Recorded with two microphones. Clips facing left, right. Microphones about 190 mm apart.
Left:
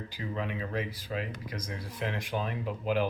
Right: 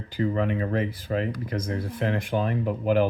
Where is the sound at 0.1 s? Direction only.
55° right (ahead or behind).